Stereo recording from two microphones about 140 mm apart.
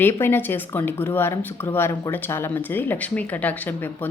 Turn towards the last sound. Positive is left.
turn(degrees=15)  # may be behind; listen again after turning